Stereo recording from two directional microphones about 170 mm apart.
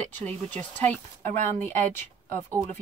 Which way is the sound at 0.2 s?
10° left (ahead or behind).